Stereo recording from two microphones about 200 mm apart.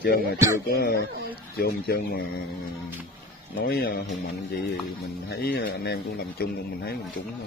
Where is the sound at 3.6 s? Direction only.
55° left (ahead or behind).